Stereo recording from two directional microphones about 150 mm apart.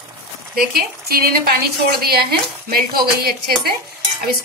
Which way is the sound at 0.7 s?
90° right.